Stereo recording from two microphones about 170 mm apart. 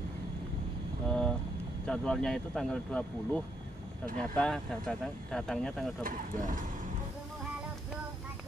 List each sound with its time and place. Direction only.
1.0 s vehicle: 5° left (ahead or behind)
1.9 s speech: 5° left (ahead or behind)
6.0 s speech: 50° right (ahead or behind)